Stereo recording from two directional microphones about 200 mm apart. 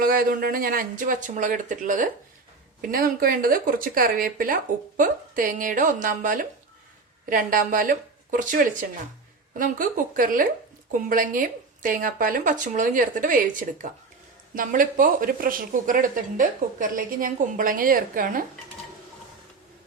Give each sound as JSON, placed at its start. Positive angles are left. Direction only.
{"t": 0.0, "sound": "speech", "side_deg": -45}